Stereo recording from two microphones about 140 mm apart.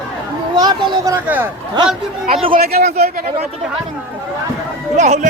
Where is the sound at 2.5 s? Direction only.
80° right.